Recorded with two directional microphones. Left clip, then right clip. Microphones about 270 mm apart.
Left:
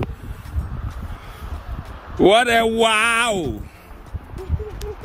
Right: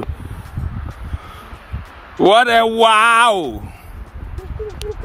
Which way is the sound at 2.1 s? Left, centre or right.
Centre.